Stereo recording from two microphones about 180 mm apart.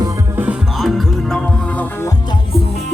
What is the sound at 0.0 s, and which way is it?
Music, 15° right (ahead or behind).